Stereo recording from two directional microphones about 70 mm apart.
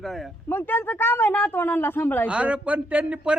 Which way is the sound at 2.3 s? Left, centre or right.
Centre.